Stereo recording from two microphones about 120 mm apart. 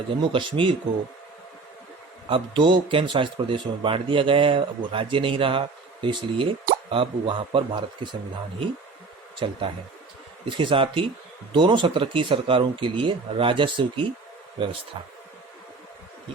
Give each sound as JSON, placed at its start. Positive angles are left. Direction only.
{"t": 0.1, "sound": "speech", "side_deg": -45}
{"t": 2.3, "sound": "speech", "side_deg": -45}
{"t": 9.4, "sound": "speech", "side_deg": -45}